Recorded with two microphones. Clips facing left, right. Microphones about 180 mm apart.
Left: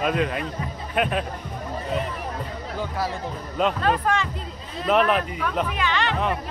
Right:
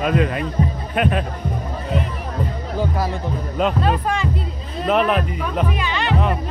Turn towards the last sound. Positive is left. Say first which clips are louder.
# right 1 dB
turn(degrees=-15)  # may be behind; listen again after turning